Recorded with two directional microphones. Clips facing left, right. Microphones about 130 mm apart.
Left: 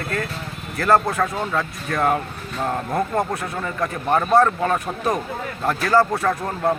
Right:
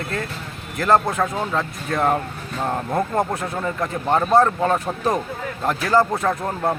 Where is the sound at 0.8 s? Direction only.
20° right (ahead or behind).